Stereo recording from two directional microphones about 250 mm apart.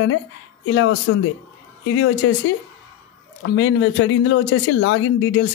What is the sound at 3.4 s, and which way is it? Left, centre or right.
Speech, left.